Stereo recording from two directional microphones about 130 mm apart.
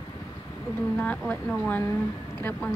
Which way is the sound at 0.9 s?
10° left (ahead or behind).